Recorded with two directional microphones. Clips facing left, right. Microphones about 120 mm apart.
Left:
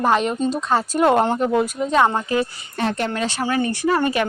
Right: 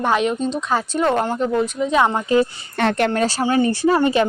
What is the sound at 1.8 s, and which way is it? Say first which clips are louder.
Speech: right 1 dB; 10° right (ahead or behind).